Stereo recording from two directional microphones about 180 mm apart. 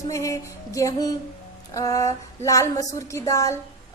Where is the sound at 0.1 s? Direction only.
15° left (ahead or behind).